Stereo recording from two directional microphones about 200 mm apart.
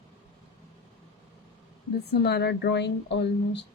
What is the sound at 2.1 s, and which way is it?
A woman's voice, 55° left (ahead or behind).